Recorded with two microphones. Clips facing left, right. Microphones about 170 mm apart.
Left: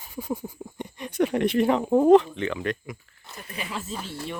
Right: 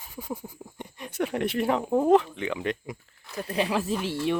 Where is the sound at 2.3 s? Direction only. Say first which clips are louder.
Left 1 dB; 15° right (ahead or behind).